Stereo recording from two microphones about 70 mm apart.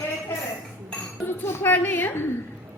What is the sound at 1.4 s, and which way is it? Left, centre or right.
Speech, left.